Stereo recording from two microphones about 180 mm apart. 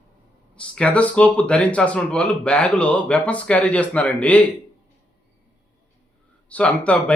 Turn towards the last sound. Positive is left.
turn(degrees=5)  # may be behind; listen again after turning